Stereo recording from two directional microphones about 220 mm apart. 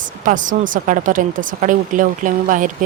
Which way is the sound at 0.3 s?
35° right (ahead or behind).